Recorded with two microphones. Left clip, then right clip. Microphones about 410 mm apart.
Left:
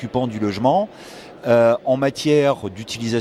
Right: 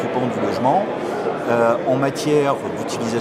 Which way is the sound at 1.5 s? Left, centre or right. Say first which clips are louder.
Left 3 dB; left.